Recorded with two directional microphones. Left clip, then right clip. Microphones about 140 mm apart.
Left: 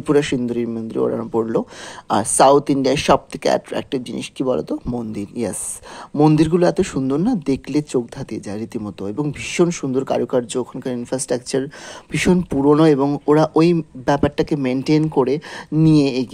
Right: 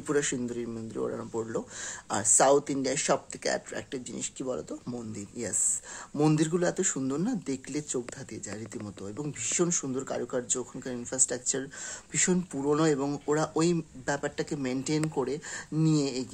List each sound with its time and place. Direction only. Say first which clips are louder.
0.0 s speech: left 12 dB; 30° left (ahead or behind)